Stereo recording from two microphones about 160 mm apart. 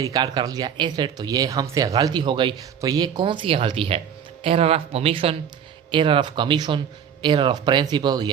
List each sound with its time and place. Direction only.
0.0 s speech: 25° right (ahead or behind)